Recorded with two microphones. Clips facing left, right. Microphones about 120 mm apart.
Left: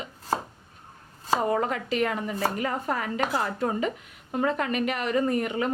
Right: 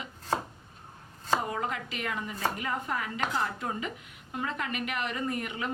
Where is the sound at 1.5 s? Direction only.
45° left (ahead or behind).